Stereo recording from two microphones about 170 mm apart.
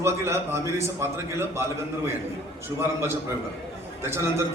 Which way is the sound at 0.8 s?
15° right (ahead or behind).